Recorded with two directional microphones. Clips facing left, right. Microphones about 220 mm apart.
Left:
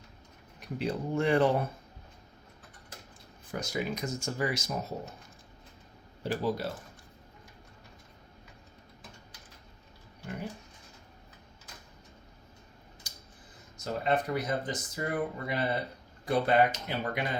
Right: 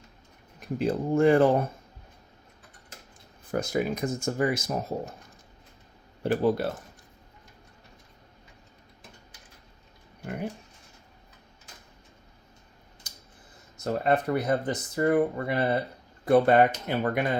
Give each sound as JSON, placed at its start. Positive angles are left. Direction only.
{"t": 0.8, "sound": "speech", "side_deg": -50}
{"t": 3.5, "sound": "speech", "side_deg": -50}
{"t": 6.2, "sound": "speech", "side_deg": -55}
{"t": 10.2, "sound": "a sound", "side_deg": -60}
{"t": 13.8, "sound": "speech", "side_deg": -60}